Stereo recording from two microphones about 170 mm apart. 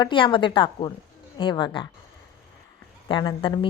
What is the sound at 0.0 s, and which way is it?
A woman's voice, 30° left (ahead or behind).